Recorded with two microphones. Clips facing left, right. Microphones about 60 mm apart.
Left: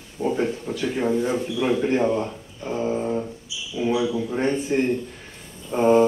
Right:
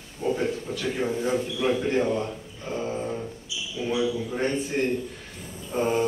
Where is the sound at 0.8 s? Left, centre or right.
Centre.